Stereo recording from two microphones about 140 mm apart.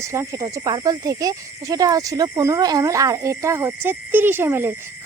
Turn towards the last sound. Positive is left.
turn(degrees=-15)  # may be behind; listen again after turning